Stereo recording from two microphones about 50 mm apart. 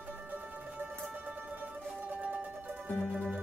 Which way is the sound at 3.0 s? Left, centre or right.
Centre.